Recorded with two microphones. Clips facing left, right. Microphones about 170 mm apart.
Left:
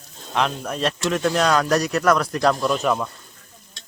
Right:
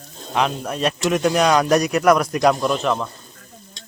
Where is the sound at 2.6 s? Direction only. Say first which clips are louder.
Even; centre (ahead or behind).